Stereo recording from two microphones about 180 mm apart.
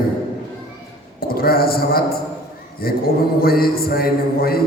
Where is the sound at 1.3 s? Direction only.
55° left (ahead or behind).